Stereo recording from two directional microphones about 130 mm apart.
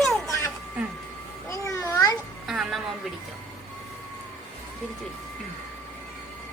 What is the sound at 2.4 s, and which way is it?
Music, 5° right (ahead or behind).